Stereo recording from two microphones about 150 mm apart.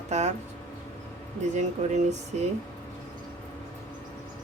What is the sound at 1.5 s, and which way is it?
Speech, 50° right (ahead or behind).